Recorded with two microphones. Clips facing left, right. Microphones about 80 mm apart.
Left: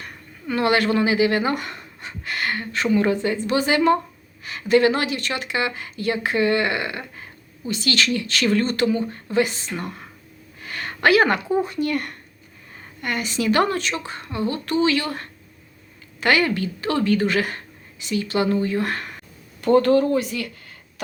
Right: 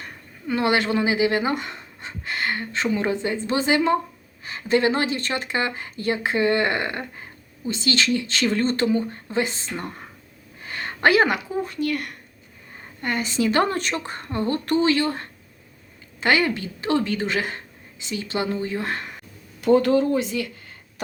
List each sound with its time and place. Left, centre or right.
0.0 s a woman's voice: right
10.6 s a sound: right
11.5 s speech: centre
13.0 s a woman's voice: right
13.7 s a woman's voice: right